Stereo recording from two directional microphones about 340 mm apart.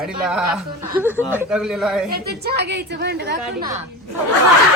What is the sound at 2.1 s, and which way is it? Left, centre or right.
A woman's voice, right.